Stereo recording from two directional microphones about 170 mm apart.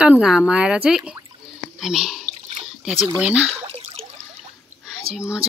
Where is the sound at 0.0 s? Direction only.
5° right (ahead or behind).